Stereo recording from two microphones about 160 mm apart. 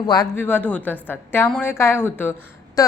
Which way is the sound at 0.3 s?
10° left (ahead or behind).